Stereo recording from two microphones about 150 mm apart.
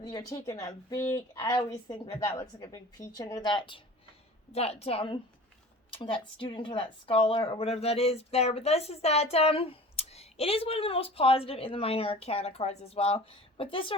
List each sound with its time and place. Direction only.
0.0 s a woman's voice: 25° left (ahead or behind)
4.5 s speech: 45° left (ahead or behind)